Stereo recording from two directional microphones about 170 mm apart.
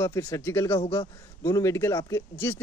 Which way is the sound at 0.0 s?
15° left (ahead or behind).